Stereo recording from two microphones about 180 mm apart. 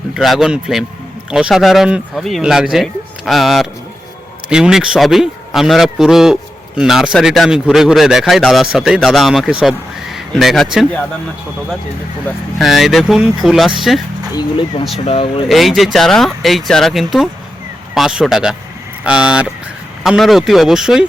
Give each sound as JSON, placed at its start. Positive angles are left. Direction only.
{"t": 0.2, "sound": "a man's voice", "side_deg": 0}
{"t": 12.5, "sound": "a man's voice", "side_deg": 0}
{"t": 14.9, "sound": "speech", "side_deg": 35}
{"t": 15.4, "sound": "a man's voice", "side_deg": 0}